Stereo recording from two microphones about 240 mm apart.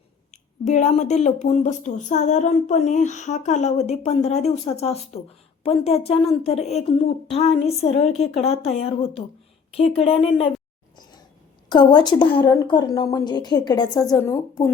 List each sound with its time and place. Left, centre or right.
0.3 s a woman's voice: left
10.9 s a sound: centre
11.7 s speech: centre